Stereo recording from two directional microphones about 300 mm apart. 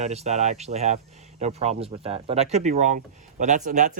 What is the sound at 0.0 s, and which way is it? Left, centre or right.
Speech, right.